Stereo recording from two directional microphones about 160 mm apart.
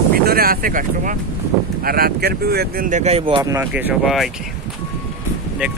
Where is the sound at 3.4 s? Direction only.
20° right (ahead or behind).